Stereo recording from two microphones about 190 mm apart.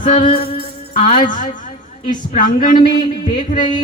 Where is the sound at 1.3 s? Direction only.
45° left (ahead or behind).